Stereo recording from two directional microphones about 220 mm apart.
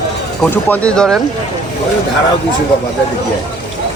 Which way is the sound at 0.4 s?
5° left (ahead or behind).